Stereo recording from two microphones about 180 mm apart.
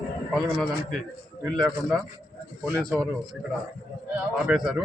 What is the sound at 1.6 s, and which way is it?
Speech, centre (ahead or behind).